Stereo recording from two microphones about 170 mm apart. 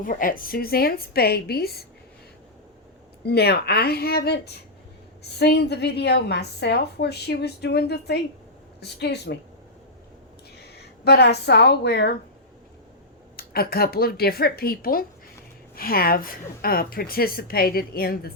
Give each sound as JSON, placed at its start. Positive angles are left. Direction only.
{"t": 0.0, "sound": "a woman's voice", "side_deg": 55}
{"t": 3.2, "sound": "a woman's voice", "side_deg": 70}
{"t": 10.6, "sound": "speech", "side_deg": 75}
{"t": 13.3, "sound": "a woman's voice", "side_deg": 65}